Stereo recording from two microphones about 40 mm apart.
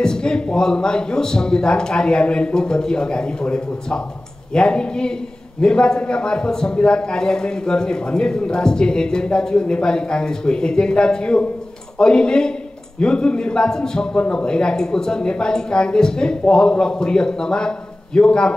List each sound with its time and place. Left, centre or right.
0.0 s a man's voice: centre